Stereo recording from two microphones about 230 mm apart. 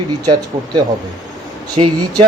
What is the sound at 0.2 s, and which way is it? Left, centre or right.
Speech, centre.